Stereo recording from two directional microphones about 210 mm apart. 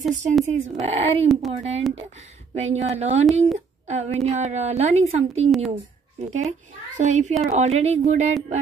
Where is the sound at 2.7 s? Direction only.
30° right (ahead or behind).